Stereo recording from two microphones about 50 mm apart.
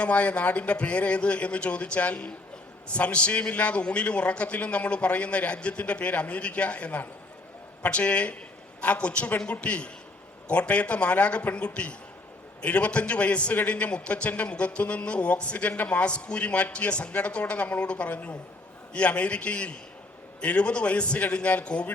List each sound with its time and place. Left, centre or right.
0.0 s a man's voice: left